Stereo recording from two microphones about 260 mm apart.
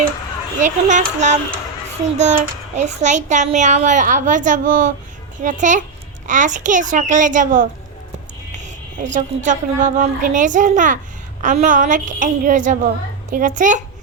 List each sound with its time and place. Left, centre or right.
0.6 s a child's voice: right
9.1 s a child's voice: right